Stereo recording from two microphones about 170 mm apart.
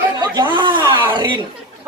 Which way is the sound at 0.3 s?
25° right (ahead or behind).